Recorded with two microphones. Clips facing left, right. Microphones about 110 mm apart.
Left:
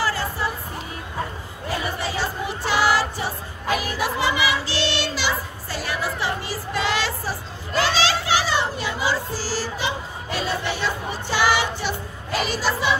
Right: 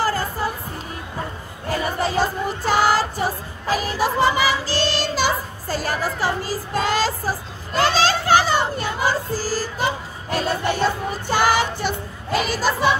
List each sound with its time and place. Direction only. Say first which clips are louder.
0.0 s music: right 2 dB; 45° right (ahead or behind)
1.8 s music: right 6 dB; 45° right (ahead or behind)
7.8 s children playing: right 4 dB; 45° right (ahead or behind)